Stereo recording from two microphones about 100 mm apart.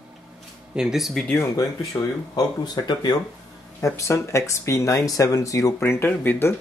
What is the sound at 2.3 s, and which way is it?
Speech, 40° left (ahead or behind).